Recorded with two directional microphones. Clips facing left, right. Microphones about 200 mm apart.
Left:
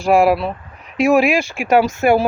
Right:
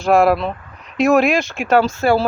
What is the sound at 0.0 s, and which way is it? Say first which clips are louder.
Speech: even; 10° left (ahead or behind).